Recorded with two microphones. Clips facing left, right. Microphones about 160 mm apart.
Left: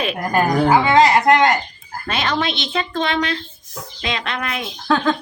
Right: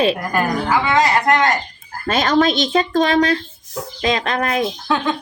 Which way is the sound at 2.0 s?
45° right (ahead or behind).